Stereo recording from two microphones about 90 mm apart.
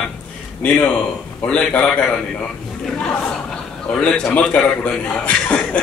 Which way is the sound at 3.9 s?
10° left (ahead or behind).